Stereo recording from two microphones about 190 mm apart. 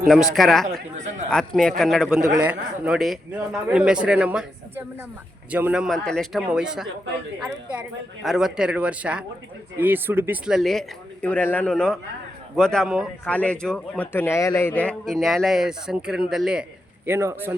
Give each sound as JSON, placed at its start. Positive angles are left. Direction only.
{"t": 0.3, "sound": "speech", "side_deg": 0}
{"t": 8.2, "sound": "speech", "side_deg": 0}
{"t": 17.1, "sound": "speech", "side_deg": -15}